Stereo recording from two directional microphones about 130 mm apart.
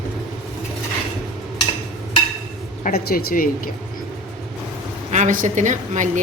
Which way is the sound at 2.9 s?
90° left.